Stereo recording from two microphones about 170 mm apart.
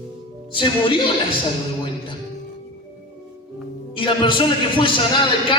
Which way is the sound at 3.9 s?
30° left (ahead or behind).